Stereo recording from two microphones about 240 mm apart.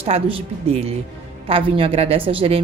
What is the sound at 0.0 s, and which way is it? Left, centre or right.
Speech, right.